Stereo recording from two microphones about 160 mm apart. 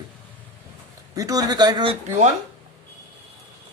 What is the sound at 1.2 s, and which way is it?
Speech, 25° right (ahead or behind).